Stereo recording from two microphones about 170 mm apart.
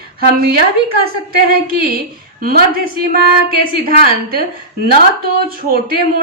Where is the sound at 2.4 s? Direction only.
60° right (ahead or behind).